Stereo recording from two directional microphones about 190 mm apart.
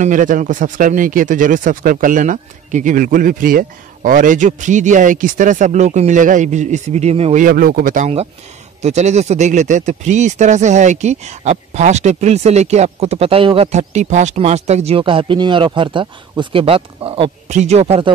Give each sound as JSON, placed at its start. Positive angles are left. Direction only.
{"t": 0.0, "sound": "speech", "side_deg": -45}
{"t": 7.4, "sound": "speech", "side_deg": -50}